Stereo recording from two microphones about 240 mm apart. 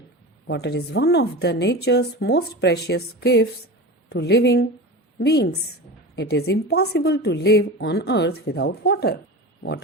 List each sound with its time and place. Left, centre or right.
0.4 s a woman's voice: left